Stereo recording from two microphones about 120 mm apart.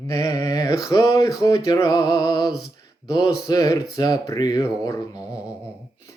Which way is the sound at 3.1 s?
35° left (ahead or behind).